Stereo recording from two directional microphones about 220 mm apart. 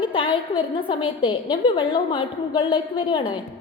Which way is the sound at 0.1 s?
25° left (ahead or behind).